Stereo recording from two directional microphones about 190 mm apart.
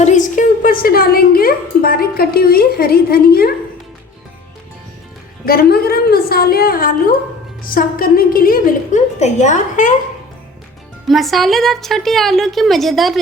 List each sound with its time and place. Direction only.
0.0 s a woman's voice: 40° left (ahead or behind)
5.5 s a woman's voice: 55° left (ahead or behind)
11.1 s a woman's voice: centre (ahead or behind)